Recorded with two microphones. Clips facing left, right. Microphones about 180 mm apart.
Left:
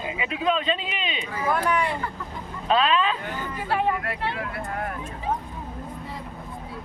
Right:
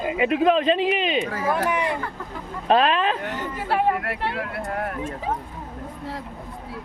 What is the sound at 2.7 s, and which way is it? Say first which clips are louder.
Speech: right 3 dB; 50° right (ahead or behind).